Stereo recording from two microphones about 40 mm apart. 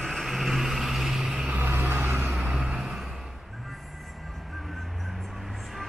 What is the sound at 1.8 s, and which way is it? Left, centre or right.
Vehicle, right.